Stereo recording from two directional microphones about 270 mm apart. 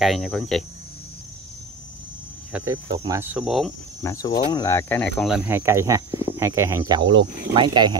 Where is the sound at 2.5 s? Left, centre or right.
Centre.